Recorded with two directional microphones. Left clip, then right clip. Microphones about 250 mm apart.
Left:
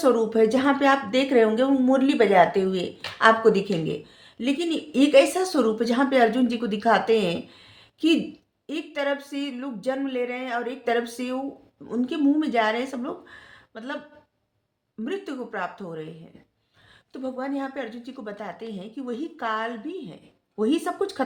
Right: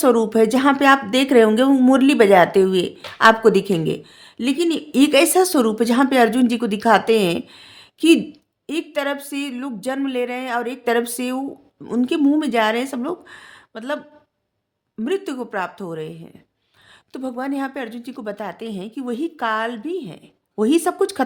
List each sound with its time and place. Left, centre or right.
0.0 s speech: right
15.0 s speech: right